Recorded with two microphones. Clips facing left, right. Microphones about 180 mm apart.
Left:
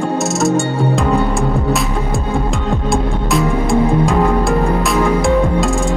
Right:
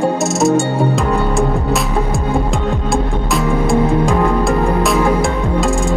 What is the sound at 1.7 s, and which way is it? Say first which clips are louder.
Music: right 1 dB; centre (ahead or behind).